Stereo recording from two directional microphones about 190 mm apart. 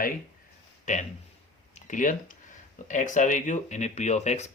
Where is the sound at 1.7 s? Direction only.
40° left (ahead or behind).